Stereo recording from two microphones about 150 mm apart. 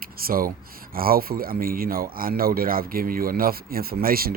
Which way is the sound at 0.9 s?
75° right (ahead or behind).